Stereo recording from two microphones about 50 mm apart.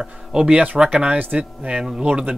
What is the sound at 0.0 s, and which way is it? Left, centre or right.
Speech, centre.